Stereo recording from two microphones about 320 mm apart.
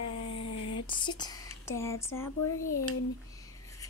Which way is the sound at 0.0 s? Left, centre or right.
Left.